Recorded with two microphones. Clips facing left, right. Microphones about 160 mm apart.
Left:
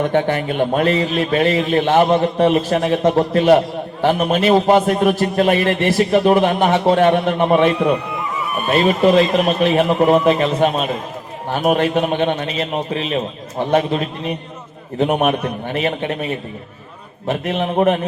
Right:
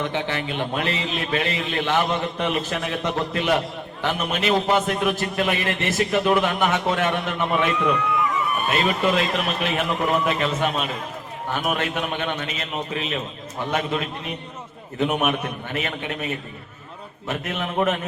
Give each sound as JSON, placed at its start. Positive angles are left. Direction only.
{"t": 0.0, "sound": "a man's voice", "side_deg": 50}
{"t": 17.2, "sound": "a man's voice", "side_deg": 35}